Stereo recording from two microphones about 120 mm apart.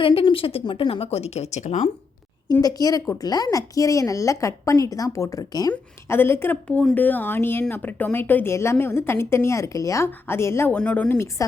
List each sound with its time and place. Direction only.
0.0 s speech: 50° left (ahead or behind); by 1.9 s 80° left
2.5 s a woman's voice: 30° left (ahead or behind)
6.1 s a woman's voice: 20° left (ahead or behind)
10.8 s speech: 10° left (ahead or behind)